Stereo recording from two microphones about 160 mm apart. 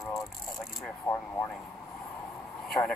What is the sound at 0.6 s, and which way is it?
Speech, 5° left (ahead or behind).